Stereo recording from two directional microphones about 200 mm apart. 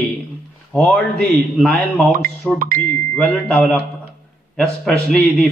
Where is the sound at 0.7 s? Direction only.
5° left (ahead or behind).